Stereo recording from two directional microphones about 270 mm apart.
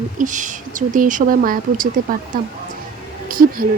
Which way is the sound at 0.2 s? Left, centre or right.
Right.